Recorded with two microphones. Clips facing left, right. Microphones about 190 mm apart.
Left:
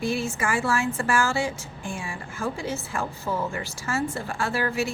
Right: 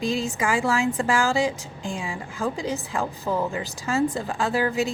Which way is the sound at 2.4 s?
15° right (ahead or behind).